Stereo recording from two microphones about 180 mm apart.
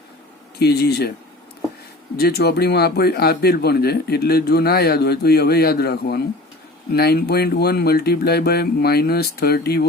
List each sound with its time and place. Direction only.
0.6 s speech: 65° left (ahead or behind)
2.1 s speech: 60° left (ahead or behind)